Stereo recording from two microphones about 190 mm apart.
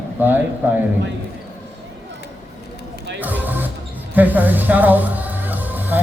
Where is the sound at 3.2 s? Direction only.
10° right (ahead or behind).